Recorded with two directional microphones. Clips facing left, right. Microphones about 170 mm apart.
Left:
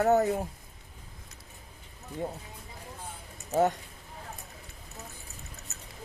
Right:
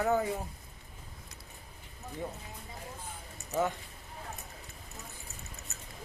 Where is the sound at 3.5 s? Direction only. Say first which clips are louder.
Left 6 dB; 45° left (ahead or behind).